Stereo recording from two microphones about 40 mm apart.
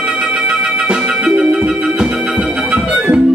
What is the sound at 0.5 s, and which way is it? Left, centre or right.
Music, right.